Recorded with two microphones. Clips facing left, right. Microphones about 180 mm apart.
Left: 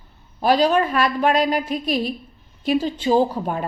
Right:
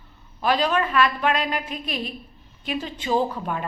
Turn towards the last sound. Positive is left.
turn(degrees=35)  # may be behind; listen again after turning